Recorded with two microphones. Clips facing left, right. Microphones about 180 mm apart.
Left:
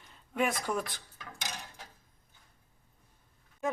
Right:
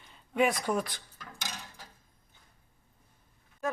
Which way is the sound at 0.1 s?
Centre (ahead or behind).